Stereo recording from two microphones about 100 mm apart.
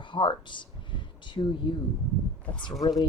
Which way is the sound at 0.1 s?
55° left (ahead or behind).